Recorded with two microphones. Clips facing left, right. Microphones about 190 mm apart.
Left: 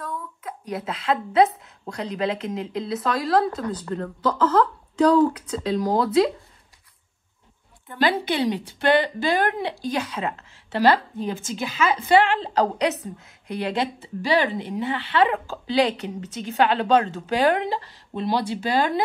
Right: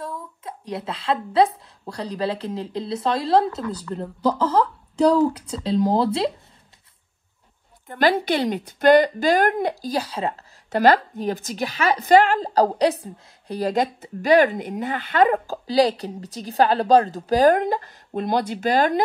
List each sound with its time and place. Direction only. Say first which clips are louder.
0.0 s a sound: even; 30° right (ahead or behind)
1.3 s a woman's voice: even; 30° right (ahead or behind)
3.4 s speech: even; 30° left (ahead or behind)
3.9 s speech: right 3 dB; 10° right (ahead or behind)
5.6 s speech: right 2 dB; 30° right (ahead or behind)
7.9 s a woman's voice: right 3 dB; 45° right (ahead or behind)